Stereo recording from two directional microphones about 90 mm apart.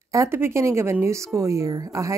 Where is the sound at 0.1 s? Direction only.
30° right (ahead or behind).